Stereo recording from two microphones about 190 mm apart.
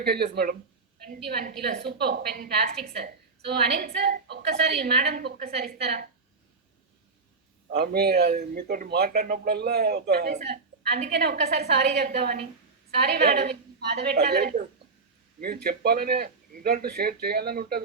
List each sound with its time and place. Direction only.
0.0 s a woman's voice: 55° right (ahead or behind)
7.8 s a woman's voice: 55° right (ahead or behind)